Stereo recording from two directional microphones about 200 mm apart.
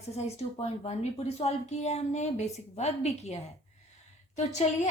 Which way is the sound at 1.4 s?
30° left (ahead or behind).